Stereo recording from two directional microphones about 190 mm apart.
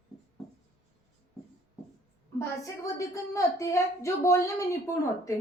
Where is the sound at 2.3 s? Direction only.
15° left (ahead or behind).